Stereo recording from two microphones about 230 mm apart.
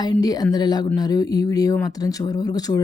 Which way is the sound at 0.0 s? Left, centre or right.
Centre.